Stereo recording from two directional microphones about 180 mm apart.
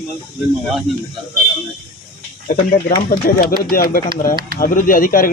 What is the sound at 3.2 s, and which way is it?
Speech, 50° left (ahead or behind).